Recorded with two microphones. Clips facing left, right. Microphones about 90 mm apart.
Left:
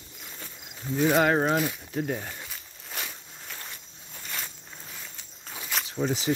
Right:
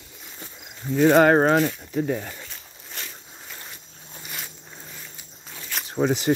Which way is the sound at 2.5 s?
5° left (ahead or behind).